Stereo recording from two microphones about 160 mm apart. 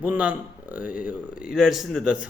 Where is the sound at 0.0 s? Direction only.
10° right (ahead or behind).